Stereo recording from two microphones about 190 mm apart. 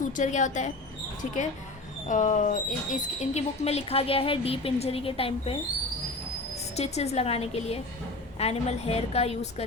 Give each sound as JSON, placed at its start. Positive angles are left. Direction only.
{"t": 0.0, "sound": "a woman's voice", "side_deg": 40}
{"t": 6.7, "sound": "speech", "side_deg": 35}